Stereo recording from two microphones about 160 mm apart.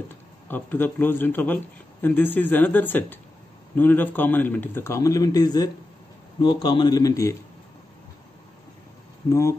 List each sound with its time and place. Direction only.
0.5 s a man's voice: 10° left (ahead or behind)
9.3 s a man's voice: 20° left (ahead or behind)